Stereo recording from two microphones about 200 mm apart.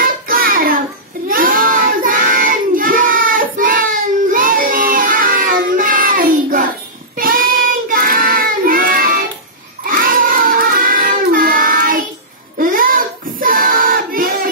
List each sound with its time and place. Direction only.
0.0 s child singing: 45° right (ahead or behind)